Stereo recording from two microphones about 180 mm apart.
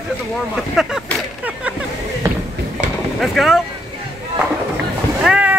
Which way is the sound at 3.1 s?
Centre (ahead or behind).